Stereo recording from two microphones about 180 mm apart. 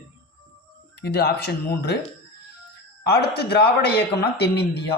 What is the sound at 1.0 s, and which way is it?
Speech, 65° left (ahead or behind).